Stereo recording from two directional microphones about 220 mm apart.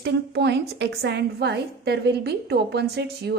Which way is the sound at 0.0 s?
50° right (ahead or behind).